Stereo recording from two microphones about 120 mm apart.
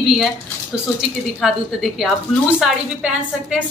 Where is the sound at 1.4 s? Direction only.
Centre (ahead or behind).